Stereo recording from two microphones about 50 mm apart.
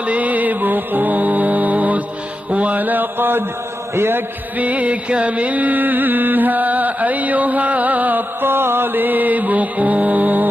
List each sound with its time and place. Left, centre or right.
0.0 s music: right
2.5 s a sound: right
3.9 s a man's voice: right
4.6 s music: right